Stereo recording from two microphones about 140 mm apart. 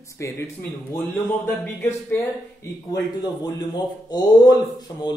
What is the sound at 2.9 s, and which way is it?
Speech, 30° left (ahead or behind).